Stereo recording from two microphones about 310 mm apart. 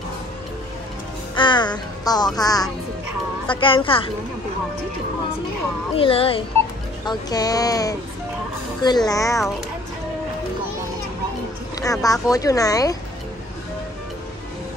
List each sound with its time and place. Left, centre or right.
1.3 s speech: centre
5.9 s speech: centre
11.8 s speech: centre